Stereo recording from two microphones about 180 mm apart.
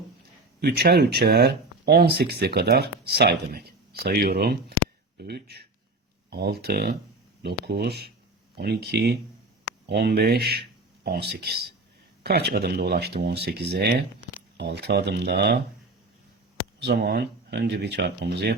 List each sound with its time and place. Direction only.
0.6 s speech: 60° right (ahead or behind)
16.8 s speech: 60° right (ahead or behind)